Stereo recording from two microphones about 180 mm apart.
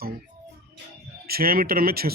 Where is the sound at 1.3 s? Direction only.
55° right (ahead or behind).